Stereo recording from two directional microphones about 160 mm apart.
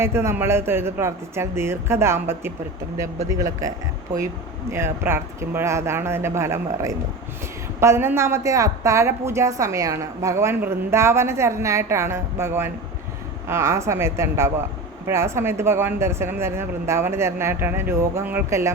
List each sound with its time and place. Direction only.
0.0 s a woman's voice: 15° right (ahead or behind)